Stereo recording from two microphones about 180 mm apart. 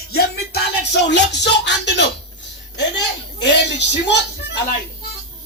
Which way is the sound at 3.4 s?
75° left (ahead or behind).